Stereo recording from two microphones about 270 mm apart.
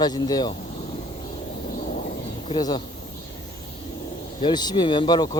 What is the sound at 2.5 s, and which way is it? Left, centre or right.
Speech, centre.